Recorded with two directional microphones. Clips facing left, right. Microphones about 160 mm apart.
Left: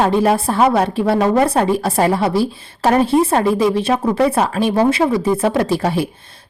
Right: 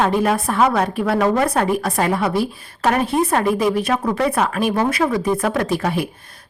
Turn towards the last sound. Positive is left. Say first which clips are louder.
# left 3 dB
turn(degrees=30)  # may be behind; listen again after turning